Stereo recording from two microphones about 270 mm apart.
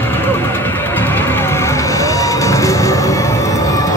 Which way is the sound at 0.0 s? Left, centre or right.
Centre.